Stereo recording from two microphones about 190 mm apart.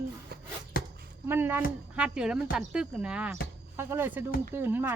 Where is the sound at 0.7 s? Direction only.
50° left (ahead or behind).